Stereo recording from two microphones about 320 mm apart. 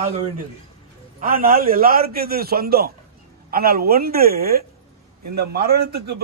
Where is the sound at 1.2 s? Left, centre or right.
Right.